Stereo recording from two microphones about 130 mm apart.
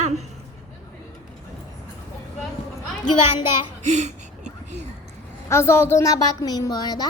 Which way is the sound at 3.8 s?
60° right (ahead or behind).